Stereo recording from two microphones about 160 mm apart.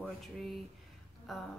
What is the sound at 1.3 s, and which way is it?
Speech, centre (ahead or behind).